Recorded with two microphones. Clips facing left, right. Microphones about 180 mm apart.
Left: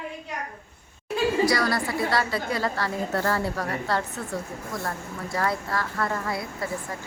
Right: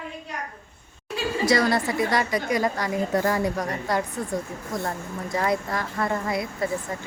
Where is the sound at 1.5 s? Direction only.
20° right (ahead or behind).